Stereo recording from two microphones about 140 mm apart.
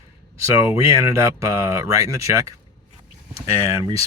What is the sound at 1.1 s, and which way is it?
Speech, 20° right (ahead or behind).